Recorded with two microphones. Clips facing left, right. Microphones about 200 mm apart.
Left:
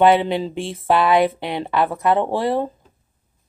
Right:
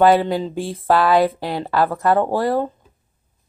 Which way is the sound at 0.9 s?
20° left (ahead or behind).